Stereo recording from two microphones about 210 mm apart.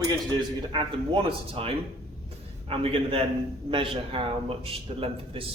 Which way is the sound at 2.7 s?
25° right (ahead or behind).